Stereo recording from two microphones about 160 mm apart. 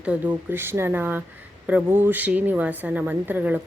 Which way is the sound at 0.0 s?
10° right (ahead or behind).